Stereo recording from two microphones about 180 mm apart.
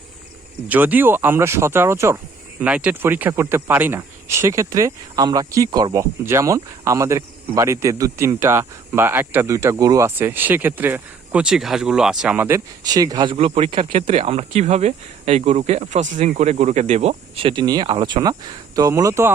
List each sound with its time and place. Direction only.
0.7 s speech: 10° right (ahead or behind)
13.3 s speech: 30° right (ahead or behind); by 19.3 s 15° right (ahead or behind)